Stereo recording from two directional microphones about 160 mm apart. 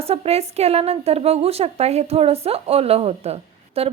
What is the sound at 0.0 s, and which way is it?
A woman's voice, 40° right (ahead or behind).